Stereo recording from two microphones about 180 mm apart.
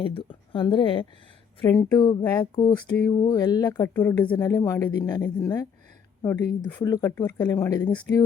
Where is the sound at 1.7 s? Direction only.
15° left (ahead or behind).